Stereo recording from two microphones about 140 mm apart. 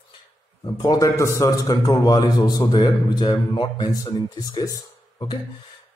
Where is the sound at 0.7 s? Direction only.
30° left (ahead or behind).